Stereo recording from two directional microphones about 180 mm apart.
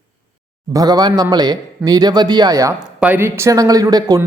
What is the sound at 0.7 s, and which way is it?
Speech, 20° right (ahead or behind).